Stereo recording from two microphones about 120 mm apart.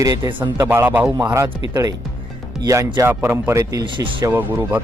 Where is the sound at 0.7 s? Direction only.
15° right (ahead or behind).